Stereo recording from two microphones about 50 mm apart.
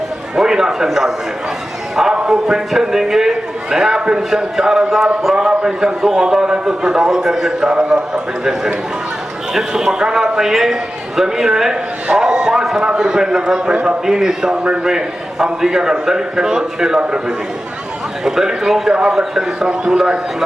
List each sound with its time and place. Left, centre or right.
0.3 s a man's voice: centre